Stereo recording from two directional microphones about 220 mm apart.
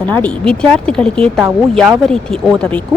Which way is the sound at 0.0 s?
5° left (ahead or behind).